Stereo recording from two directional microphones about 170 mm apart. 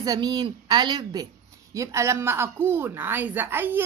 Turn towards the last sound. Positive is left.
turn(degrees=-10)  # may be behind; listen again after turning